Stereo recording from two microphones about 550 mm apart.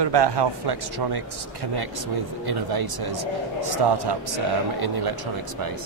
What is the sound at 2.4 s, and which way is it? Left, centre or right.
A man's voice, right.